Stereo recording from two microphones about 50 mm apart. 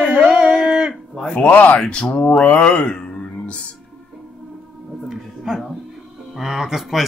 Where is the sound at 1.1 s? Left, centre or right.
Left.